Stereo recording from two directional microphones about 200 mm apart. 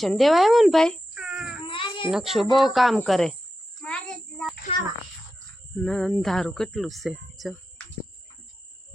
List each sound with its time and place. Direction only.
0.0 s a child's voice: centre (ahead or behind)
1.6 s baby cry: 25° left (ahead or behind)
2.0 s speech: centre (ahead or behind)
3.8 s a sound: 5° left (ahead or behind)
5.7 s speech: 5° left (ahead or behind)